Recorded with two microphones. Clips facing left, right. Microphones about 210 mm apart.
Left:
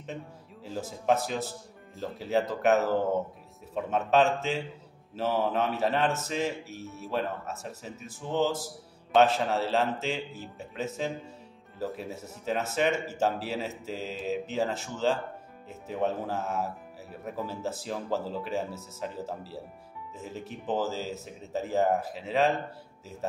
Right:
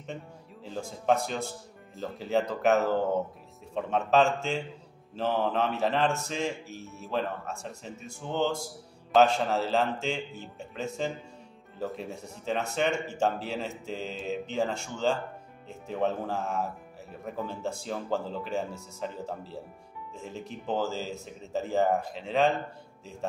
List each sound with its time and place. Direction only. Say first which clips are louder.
0.7 s music: even; 5° left (ahead or behind)